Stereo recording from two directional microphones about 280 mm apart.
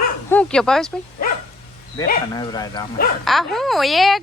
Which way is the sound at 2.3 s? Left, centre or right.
Centre.